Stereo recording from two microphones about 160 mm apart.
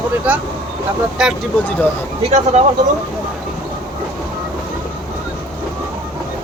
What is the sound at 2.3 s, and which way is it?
Speech, 45° right (ahead or behind).